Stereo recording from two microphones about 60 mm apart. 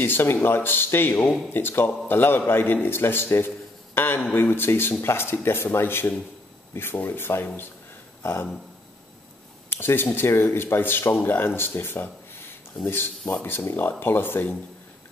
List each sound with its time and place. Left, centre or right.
0.0 s a man's voice: left
8.2 s a sound: left
9.7 s speech: left